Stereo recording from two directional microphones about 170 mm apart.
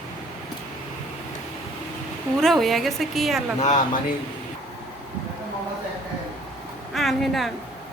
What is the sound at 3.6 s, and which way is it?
Speech, 45° left (ahead or behind).